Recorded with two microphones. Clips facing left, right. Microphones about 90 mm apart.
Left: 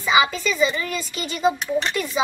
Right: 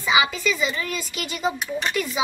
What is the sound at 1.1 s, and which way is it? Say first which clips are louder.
Speech: left 2 dB; 35° left (ahead or behind).